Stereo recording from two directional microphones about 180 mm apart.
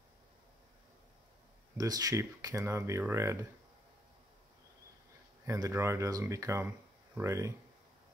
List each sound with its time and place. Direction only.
1.8 s speech: 20° right (ahead or behind)
5.5 s speech: 15° right (ahead or behind)